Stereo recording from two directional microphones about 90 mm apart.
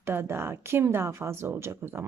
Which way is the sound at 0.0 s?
25° right (ahead or behind).